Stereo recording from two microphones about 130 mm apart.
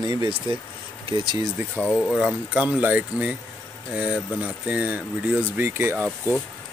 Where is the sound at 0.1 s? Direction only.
35° right (ahead or behind).